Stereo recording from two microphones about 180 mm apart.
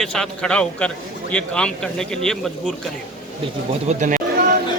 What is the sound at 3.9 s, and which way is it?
Speech, 45° right (ahead or behind).